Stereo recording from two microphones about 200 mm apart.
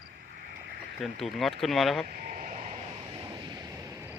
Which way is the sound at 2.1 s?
45° right (ahead or behind).